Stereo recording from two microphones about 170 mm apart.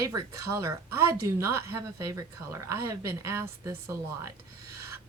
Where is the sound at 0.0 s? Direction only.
20° right (ahead or behind).